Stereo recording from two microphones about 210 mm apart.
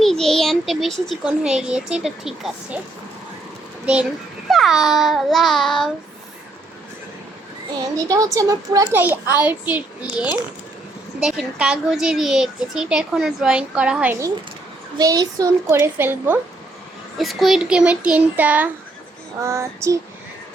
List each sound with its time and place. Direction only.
0.0 s a child's voice: centre (ahead or behind)
4.4 s a child's voice: centre (ahead or behind)
7.9 s a woman's voice: 15° right (ahead or behind)